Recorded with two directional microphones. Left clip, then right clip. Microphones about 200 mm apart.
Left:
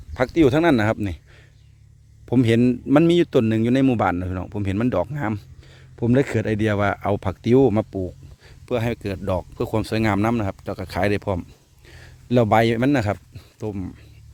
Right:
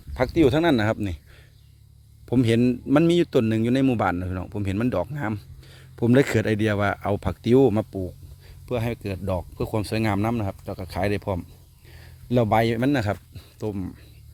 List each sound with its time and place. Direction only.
0.1 s a man's voice: 10° left (ahead or behind)
2.2 s a man's voice: 10° left (ahead or behind)
5.6 s a man's voice: 5° right (ahead or behind); by 8.1 s 15° left (ahead or behind)
8.4 s speech: 30° left (ahead or behind)
13.3 s speech: centre (ahead or behind)